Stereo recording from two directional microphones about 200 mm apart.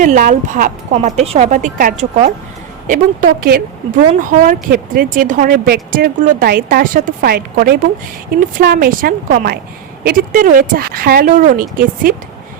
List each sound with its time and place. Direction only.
0.0 s speech: 40° right (ahead or behind)